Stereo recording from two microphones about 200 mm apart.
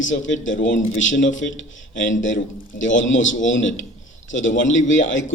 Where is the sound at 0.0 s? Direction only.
70° left (ahead or behind).